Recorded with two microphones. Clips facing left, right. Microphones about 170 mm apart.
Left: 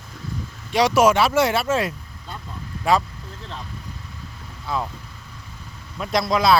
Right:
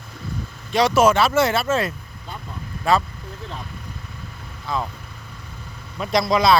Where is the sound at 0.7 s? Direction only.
10° left (ahead or behind).